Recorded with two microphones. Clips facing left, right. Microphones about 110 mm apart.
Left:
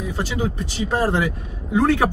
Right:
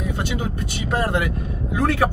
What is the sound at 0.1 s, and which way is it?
Vehicle, 30° left (ahead or behind).